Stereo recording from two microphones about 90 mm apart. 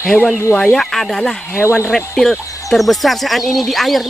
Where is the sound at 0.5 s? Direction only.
5° left (ahead or behind).